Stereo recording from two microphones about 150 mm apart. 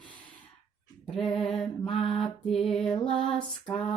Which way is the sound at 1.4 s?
Centre (ahead or behind).